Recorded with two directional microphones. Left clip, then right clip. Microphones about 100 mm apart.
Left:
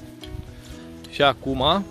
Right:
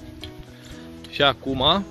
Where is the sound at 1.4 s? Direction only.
5° left (ahead or behind).